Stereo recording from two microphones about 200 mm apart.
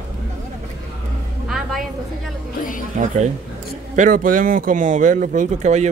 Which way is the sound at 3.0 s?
40° right (ahead or behind).